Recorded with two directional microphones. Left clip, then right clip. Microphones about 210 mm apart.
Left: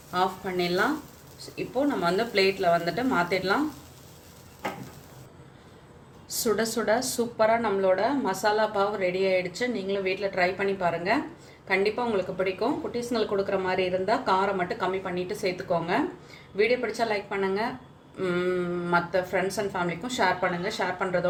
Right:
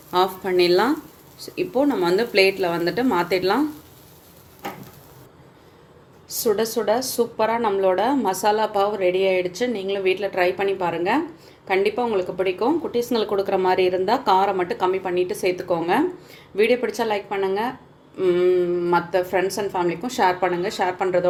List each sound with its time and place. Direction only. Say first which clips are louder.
0.1 s a woman's voice: right 7 dB; 45° right (ahead or behind)
6.4 s a woman's voice: right 5 dB; 15° right (ahead or behind); by 21.2 s 35° right (ahead or behind)